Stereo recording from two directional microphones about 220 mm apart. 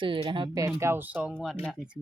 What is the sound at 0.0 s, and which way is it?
Speech, 20° right (ahead or behind).